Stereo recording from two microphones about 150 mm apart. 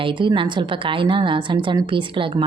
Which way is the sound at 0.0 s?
30° right (ahead or behind).